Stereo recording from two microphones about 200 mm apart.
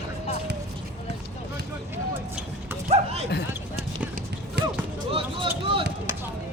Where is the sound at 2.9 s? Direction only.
30° right (ahead or behind).